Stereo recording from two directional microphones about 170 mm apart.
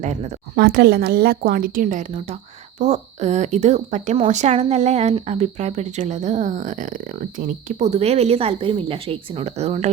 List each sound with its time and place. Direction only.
0.0 s speech: 45° right (ahead or behind)
0.6 s a woman's voice: 70° right (ahead or behind); by 9.9 s 40° right (ahead or behind)